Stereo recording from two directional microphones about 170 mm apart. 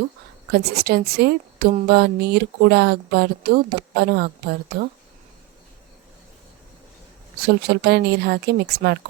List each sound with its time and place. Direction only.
0.5 s speech: 65° right (ahead or behind)
7.4 s speech: 70° right (ahead or behind)